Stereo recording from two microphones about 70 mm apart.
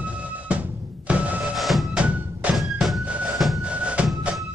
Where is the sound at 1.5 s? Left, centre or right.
Centre.